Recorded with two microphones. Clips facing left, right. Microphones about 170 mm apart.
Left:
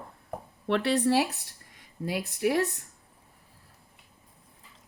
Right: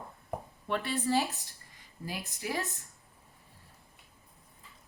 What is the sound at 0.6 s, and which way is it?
Speech, 75° left (ahead or behind).